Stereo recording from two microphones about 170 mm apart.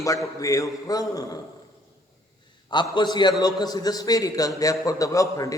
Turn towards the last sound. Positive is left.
turn(degrees=20)  # may be behind; listen again after turning